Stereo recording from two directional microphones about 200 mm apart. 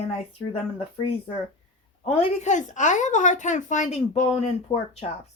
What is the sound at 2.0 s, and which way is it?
A woman's voice, 30° left (ahead or behind).